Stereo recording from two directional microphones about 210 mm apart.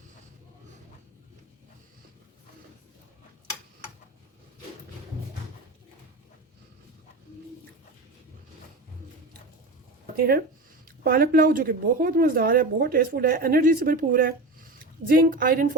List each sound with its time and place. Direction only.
10.2 s a woman's voice: 45° right (ahead or behind)